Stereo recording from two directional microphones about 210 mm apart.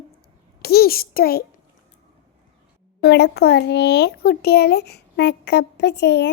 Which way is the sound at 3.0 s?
55° left (ahead or behind).